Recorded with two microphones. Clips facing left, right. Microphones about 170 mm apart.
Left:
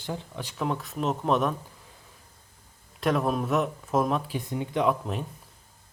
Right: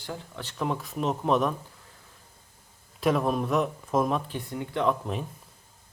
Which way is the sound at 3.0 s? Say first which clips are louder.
Right 1 dB; centre (ahead or behind).